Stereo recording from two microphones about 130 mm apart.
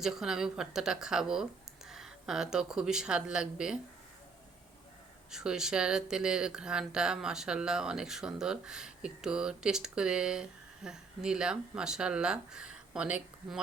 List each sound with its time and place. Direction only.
0.0 s speech: 5° right (ahead or behind)
5.3 s speech: 5° right (ahead or behind)